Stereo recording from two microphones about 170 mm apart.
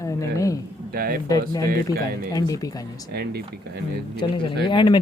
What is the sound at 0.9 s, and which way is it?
Speech, 60° right (ahead or behind).